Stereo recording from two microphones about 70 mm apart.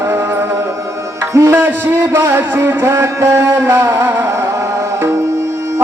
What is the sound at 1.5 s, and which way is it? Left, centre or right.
Music, right.